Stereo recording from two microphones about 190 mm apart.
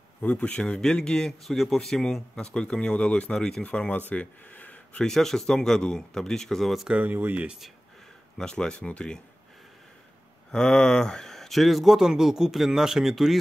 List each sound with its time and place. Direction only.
0.2 s speech: 5° left (ahead or behind)
10.5 s speech: 5° left (ahead or behind)